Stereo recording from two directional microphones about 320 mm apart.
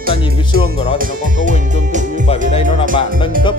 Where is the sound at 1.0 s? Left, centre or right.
Right.